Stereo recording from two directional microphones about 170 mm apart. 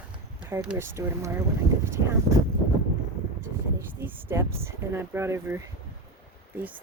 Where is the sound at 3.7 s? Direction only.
10° right (ahead or behind).